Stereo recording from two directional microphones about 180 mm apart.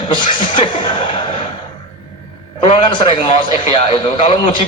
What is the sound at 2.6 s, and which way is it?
A man's voice, 30° left (ahead or behind).